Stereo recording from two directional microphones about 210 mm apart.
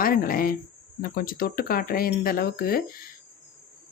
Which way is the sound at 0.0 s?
45° left (ahead or behind).